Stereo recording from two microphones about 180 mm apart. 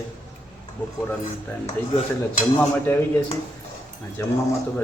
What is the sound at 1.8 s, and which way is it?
Speech, 10° left (ahead or behind).